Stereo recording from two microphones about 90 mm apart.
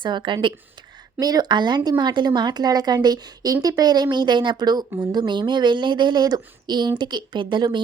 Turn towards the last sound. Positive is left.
turn(degrees=-60)  # may be behind; listen again after turning